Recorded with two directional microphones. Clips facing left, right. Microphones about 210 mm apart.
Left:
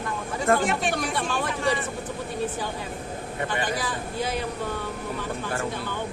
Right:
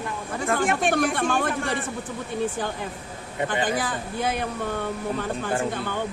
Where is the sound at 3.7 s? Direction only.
55° right (ahead or behind).